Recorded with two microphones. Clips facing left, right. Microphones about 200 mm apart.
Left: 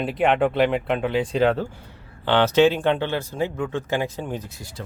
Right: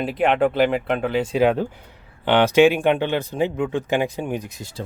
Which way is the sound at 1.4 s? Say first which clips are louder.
Right 3 dB; 15° right (ahead or behind).